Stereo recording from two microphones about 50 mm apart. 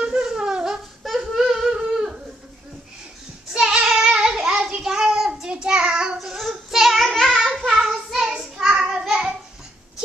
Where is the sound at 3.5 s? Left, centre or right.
Centre.